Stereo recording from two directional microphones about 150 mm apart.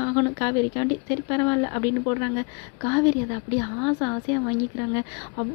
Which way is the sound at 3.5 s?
20° left (ahead or behind).